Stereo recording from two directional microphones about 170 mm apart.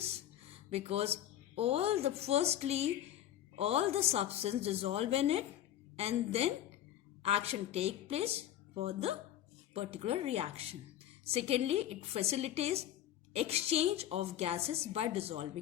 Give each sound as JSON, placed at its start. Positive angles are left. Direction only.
{"t": 0.7, "sound": "a woman's voice", "side_deg": -35}